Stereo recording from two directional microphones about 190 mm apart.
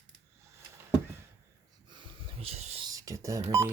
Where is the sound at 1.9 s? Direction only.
25° right (ahead or behind).